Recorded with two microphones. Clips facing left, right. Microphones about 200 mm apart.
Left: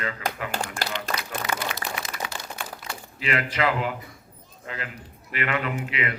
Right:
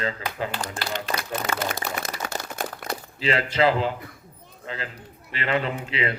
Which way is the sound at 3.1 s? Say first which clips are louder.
Right 3 dB; 30° right (ahead or behind).